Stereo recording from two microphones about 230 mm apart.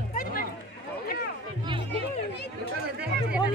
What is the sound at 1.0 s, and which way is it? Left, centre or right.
Run, left.